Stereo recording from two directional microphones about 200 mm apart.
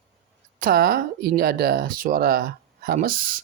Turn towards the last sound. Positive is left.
turn(degrees=-45)  # may be behind; listen again after turning